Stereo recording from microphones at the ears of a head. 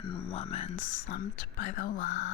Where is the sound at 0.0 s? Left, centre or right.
Left.